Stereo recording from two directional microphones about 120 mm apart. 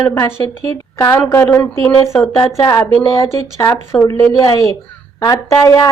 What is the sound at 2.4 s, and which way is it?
Speech, 25° left (ahead or behind).